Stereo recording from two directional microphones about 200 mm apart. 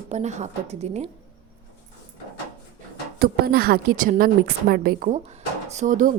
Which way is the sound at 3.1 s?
50° right (ahead or behind).